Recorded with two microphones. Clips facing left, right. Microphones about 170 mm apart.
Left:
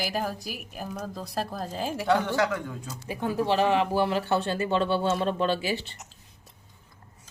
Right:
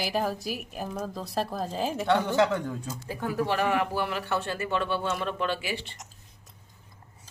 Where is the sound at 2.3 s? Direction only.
25° right (ahead or behind).